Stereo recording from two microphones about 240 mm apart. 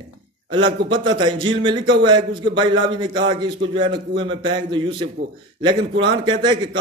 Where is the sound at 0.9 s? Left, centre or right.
Centre.